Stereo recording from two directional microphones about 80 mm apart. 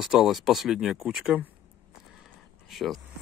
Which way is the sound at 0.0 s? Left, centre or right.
Centre.